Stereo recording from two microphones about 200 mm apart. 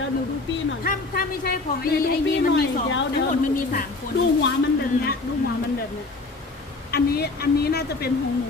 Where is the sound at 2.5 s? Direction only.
65° left (ahead or behind).